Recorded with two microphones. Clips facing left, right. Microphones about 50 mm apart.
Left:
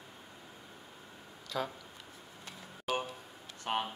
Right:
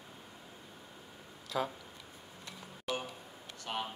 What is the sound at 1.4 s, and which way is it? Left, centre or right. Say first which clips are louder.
Speech: right 1 dB; centre.